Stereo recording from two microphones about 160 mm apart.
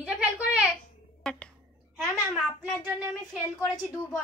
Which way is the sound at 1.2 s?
Centre (ahead or behind).